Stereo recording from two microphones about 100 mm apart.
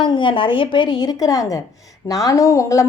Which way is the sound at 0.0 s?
50° left (ahead or behind).